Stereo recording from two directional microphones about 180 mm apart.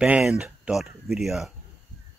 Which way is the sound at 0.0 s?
5° right (ahead or behind).